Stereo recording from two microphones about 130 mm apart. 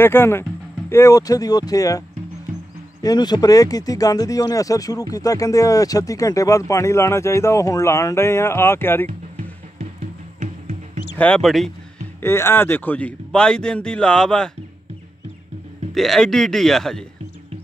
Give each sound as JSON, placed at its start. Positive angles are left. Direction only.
{"t": 0.0, "sound": "speech", "side_deg": 15}
{"t": 11.1, "sound": "speech", "side_deg": 10}
{"t": 12.2, "sound": "speech", "side_deg": 20}
{"t": 15.9, "sound": "speech", "side_deg": 0}